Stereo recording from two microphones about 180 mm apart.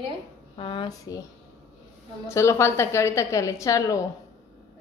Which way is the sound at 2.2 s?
15° left (ahead or behind).